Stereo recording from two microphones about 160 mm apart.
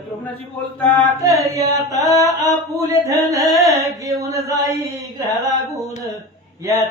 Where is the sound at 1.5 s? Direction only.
20° right (ahead or behind).